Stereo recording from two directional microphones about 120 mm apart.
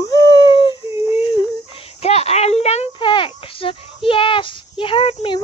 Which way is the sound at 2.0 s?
60° left (ahead or behind).